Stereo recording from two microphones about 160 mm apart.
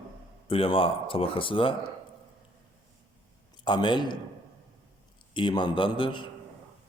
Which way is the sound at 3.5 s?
25° left (ahead or behind).